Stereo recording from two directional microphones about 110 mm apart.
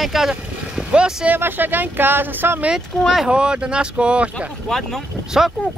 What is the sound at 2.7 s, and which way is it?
Speech, 5° right (ahead or behind).